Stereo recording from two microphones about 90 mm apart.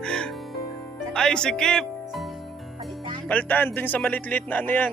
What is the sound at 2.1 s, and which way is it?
Music, centre (ahead or behind).